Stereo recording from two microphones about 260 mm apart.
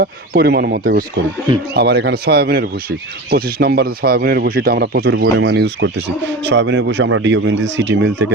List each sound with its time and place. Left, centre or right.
0.0 s speech: right